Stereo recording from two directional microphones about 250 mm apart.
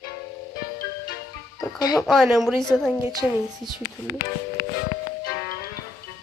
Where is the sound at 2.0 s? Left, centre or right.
Centre.